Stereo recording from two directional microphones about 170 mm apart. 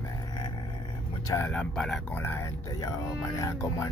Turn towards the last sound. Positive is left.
turn(degrees=20)  # may be behind; listen again after turning